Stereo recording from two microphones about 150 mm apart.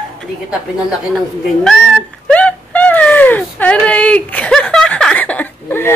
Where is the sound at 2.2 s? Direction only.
10° left (ahead or behind).